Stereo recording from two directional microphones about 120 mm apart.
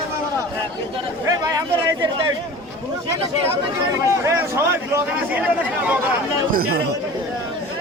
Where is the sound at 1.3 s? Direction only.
35° right (ahead or behind).